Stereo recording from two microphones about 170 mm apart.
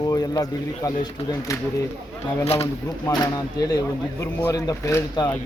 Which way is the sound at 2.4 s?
35° left (ahead or behind).